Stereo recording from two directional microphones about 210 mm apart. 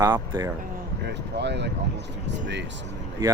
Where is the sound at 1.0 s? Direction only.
55° right (ahead or behind).